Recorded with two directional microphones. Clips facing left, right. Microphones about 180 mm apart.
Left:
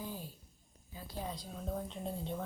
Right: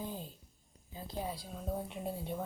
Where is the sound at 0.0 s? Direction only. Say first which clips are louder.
Right 2 dB; 20° right (ahead or behind).